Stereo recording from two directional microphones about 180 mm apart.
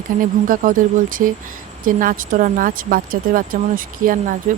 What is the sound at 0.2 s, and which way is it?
Speech, 50° right (ahead or behind).